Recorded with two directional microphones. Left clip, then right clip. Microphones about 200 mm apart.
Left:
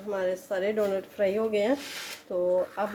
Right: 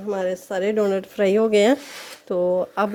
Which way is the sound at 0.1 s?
50° right (ahead or behind).